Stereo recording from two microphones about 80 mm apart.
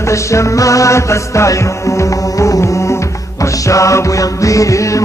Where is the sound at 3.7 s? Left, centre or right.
Left.